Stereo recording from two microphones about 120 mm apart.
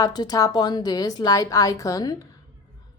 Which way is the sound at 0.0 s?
35° left (ahead or behind).